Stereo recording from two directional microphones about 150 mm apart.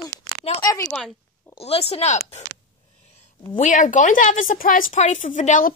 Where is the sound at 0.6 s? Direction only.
20° left (ahead or behind).